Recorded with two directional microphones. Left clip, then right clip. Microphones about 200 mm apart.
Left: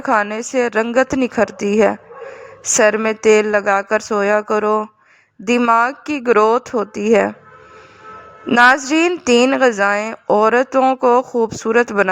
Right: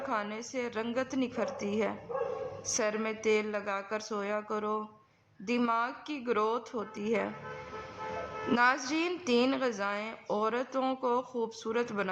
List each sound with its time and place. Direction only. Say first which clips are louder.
0.0 s a woman's voice: left 18 dB; 45° left (ahead or behind)
5.5 s a woman's voice: left 17 dB; 30° left (ahead or behind)
5.8 s a woman's voice: left 17 dB; 45° left (ahead or behind)
8.5 s a woman's voice: left 17 dB; 45° left (ahead or behind)